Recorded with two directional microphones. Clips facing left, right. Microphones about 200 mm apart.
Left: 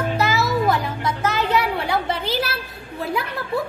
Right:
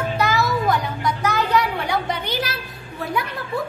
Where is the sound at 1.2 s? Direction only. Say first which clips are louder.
Even; 25° left (ahead or behind).